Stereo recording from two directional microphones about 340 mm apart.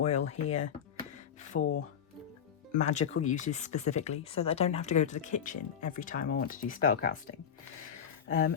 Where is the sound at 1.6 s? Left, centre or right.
Left.